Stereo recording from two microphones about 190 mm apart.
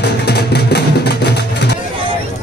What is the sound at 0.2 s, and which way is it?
Music, 60° left (ahead or behind).